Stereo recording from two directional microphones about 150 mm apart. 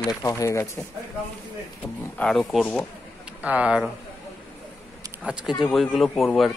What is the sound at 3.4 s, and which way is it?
Speech, 10° right (ahead or behind).